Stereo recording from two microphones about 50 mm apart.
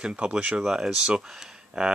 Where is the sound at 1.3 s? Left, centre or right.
Centre.